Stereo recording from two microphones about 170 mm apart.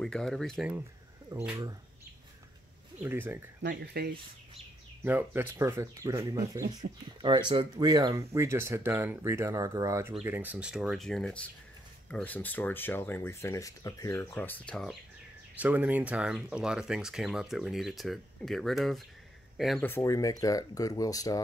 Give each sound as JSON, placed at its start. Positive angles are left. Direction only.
{"t": 0.0, "sound": "speech", "side_deg": 0}
{"t": 1.3, "sound": "speech", "side_deg": -20}
{"t": 3.0, "sound": "speech", "side_deg": -10}
{"t": 3.6, "sound": "speech", "side_deg": -70}
{"t": 5.0, "sound": "speech", "side_deg": -10}
{"t": 15.6, "sound": "speech", "side_deg": -10}
{"t": 19.8, "sound": "speech", "side_deg": 15}